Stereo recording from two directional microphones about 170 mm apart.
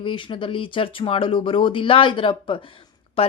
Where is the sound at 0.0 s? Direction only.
30° left (ahead or behind).